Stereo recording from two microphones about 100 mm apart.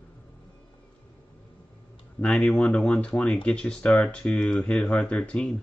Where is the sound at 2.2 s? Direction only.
5° left (ahead or behind).